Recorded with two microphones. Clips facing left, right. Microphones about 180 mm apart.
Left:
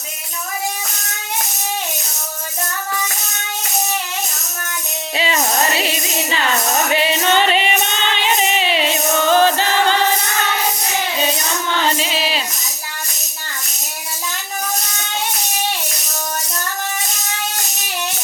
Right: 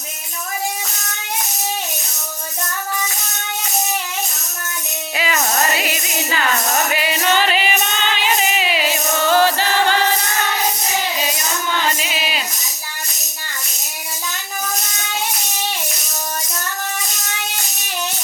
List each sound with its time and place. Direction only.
5.1 s music: 30° left (ahead or behind)
11.9 s music: 30° left (ahead or behind)